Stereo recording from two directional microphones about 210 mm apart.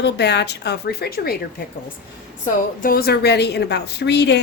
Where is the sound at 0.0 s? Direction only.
55° left (ahead or behind).